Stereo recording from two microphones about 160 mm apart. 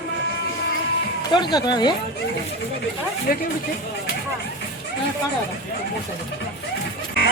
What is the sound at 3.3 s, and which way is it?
Music, 65° left (ahead or behind).